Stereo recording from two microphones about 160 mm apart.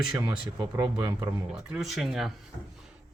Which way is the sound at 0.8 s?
25° right (ahead or behind).